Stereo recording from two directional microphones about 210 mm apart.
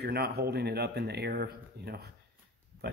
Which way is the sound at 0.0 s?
50° right (ahead or behind).